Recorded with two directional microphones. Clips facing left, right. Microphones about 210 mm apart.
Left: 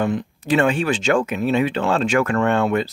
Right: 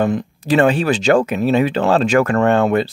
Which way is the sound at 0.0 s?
40° right (ahead or behind).